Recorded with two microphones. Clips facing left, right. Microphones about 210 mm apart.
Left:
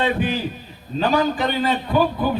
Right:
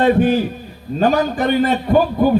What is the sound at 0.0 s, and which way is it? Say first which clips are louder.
A man's voice: right 8 dB; 45° right (ahead or behind).